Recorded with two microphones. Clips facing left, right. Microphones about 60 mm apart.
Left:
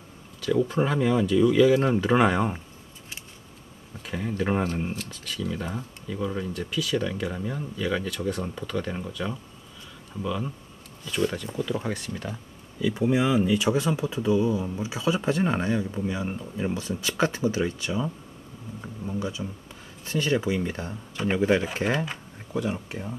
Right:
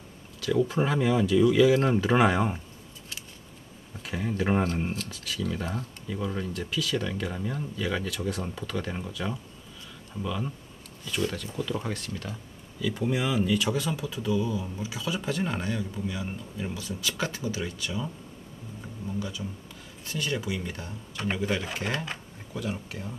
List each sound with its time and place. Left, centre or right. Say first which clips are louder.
0.4 s speech: left 2 dB; centre
4.0 s speech: left 1 dB; centre
11.5 s speech: left 3 dB; centre; by 21.6 s left
21.9 s speech: left 4 dB; centre
22.5 s speech: left 5 dB; centre